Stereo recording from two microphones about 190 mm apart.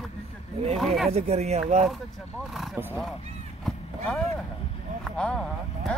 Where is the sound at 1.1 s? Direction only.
35° right (ahead or behind).